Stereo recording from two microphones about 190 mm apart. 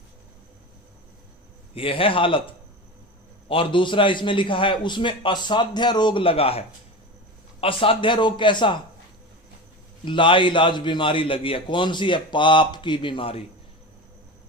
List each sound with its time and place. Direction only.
1.7 s a man's voice: 30° left (ahead or behind)
10.1 s a man's voice: 25° left (ahead or behind)